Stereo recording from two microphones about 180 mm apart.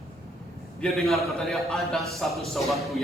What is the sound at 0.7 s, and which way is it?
A man's voice, 5° left (ahead or behind).